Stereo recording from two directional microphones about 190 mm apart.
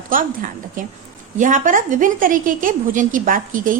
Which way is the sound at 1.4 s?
45° right (ahead or behind).